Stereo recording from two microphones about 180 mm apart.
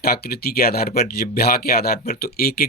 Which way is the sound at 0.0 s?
60° left (ahead or behind).